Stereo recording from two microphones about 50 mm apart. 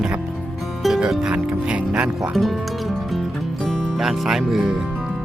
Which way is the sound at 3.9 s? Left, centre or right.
Centre.